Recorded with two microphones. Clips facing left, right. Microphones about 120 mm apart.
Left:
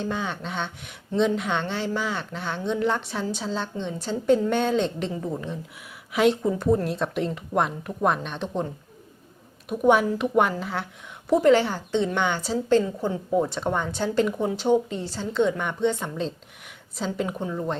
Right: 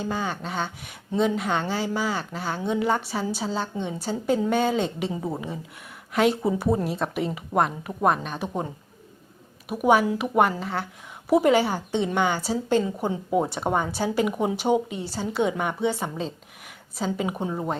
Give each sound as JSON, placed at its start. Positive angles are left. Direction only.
{"t": 0.0, "sound": "speech", "side_deg": 0}
{"t": 9.6, "sound": "speech", "side_deg": -5}
{"t": 11.3, "sound": "a woman's voice", "side_deg": -10}
{"t": 17.3, "sound": "a woman's voice", "side_deg": -20}